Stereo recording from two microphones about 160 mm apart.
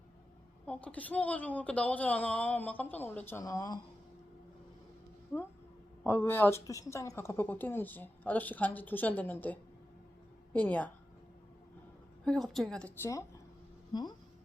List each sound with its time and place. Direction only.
0.6 s speech: 10° left (ahead or behind)
6.0 s speech: 15° left (ahead or behind)
12.2 s a woman's voice: 5° left (ahead or behind)
13.0 s speech: 20° left (ahead or behind)